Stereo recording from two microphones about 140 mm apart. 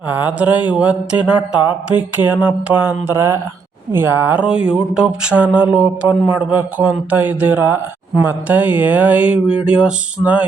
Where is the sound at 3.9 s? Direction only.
15° right (ahead or behind).